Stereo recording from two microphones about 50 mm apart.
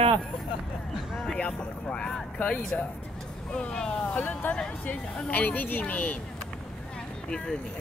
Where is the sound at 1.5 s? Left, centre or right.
Centre.